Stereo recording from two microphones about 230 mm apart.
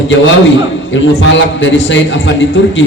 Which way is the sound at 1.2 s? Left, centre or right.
Left.